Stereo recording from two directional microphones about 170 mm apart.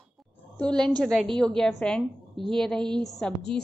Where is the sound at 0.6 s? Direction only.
5° left (ahead or behind).